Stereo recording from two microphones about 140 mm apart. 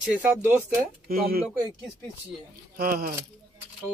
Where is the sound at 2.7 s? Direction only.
90° right.